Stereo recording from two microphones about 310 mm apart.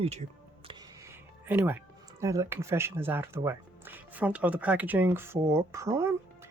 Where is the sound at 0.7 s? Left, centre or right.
Centre.